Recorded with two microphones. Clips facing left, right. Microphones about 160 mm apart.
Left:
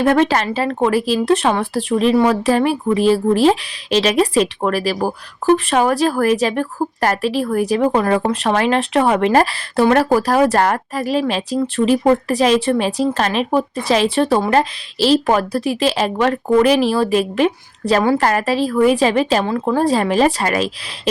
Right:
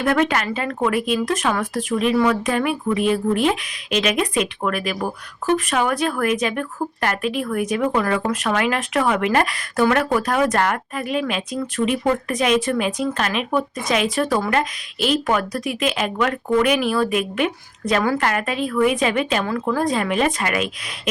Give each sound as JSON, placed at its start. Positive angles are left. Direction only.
{"t": 0.0, "sound": "speech", "side_deg": 30}